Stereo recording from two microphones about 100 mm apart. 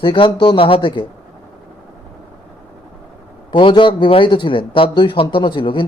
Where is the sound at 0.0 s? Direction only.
55° left (ahead or behind).